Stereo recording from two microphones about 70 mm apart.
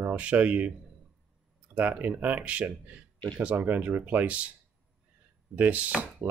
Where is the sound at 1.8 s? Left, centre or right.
Right.